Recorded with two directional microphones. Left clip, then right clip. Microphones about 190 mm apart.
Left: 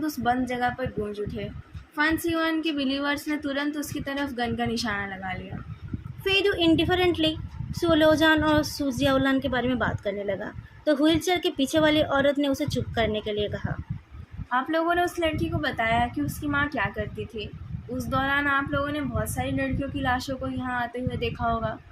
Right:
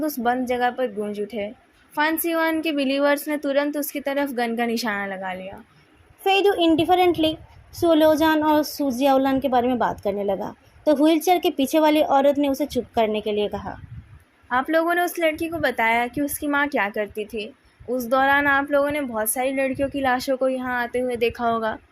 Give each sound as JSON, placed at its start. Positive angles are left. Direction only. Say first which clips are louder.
{"t": 0.0, "sound": "a woman's voice", "louder": "right 3 dB", "side_deg": -35}
{"t": 6.2, "sound": "a woman's voice", "louder": "right 4 dB", "side_deg": -15}
{"t": 7.8, "sound": "child singing", "louder": "right 3 dB", "side_deg": -20}
{"t": 14.5, "sound": "speech", "louder": "right 4 dB", "side_deg": -40}